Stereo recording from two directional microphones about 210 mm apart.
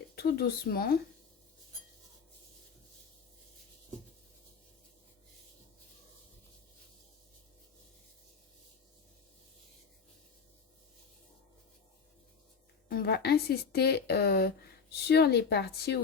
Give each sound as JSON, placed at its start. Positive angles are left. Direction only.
{"t": 0.2, "sound": "a woman's voice", "side_deg": 50}
{"t": 12.9, "sound": "a woman's voice", "side_deg": 45}